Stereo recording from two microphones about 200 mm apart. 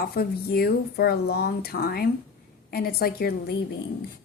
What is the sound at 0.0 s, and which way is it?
Speech, 50° left (ahead or behind).